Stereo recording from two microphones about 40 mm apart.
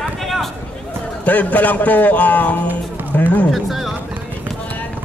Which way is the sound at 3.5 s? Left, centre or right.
Centre.